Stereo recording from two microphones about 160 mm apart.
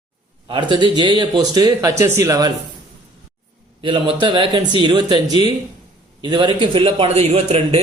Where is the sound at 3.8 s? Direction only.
30° right (ahead or behind).